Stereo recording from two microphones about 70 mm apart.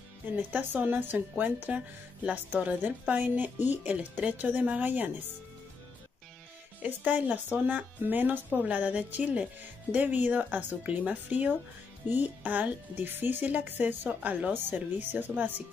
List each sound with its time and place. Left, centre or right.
0.4 s a woman's voice: right
6.8 s a woman's voice: right